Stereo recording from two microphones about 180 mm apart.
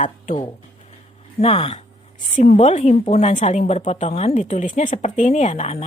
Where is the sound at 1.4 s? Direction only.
35° left (ahead or behind).